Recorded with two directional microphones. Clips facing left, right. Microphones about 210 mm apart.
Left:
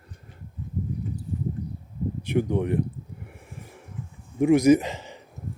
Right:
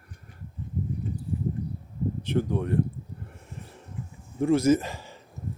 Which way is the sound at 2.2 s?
10° left (ahead or behind).